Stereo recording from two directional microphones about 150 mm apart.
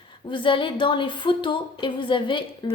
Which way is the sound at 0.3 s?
35° left (ahead or behind).